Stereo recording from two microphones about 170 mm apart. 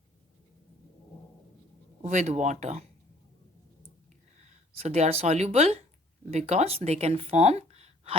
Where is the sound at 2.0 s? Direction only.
45° right (ahead or behind).